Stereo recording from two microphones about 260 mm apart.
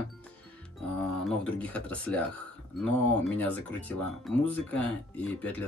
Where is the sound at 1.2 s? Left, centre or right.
Centre.